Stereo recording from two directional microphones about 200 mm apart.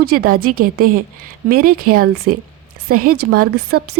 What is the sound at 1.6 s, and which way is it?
Speech, 90° right.